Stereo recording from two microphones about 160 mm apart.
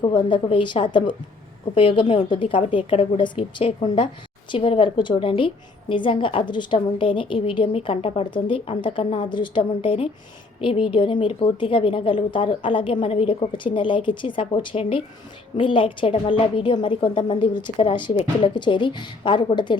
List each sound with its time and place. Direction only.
0.0 s a woman's voice: 30° left (ahead or behind)